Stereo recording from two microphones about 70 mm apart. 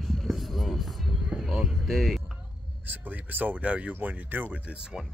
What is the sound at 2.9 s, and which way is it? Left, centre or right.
Speech, right.